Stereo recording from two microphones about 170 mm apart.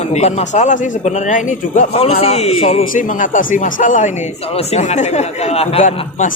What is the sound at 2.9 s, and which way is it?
Speech, 50° left (ahead or behind).